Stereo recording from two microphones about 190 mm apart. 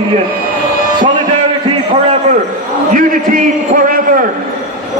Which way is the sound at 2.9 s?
45° right (ahead or behind).